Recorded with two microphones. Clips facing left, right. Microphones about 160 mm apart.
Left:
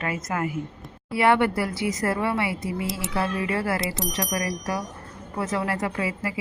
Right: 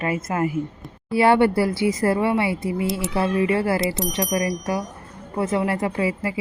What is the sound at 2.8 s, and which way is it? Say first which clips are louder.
Speech: right 6 dB; centre (ahead or behind).